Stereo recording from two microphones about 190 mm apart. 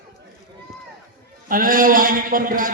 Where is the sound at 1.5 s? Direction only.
45° right (ahead or behind).